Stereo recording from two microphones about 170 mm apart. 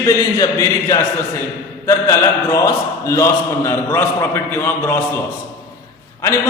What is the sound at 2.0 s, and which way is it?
A man's voice, 20° left (ahead or behind).